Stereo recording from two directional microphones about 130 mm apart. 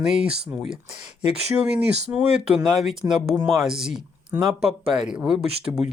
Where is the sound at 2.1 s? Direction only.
10° right (ahead or behind).